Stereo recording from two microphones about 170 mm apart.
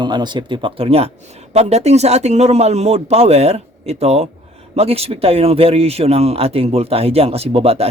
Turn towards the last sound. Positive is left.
turn(degrees=-35)  # may be behind; listen again after turning